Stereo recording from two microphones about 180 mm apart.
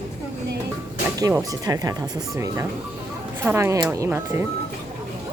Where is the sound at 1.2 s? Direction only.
20° right (ahead or behind).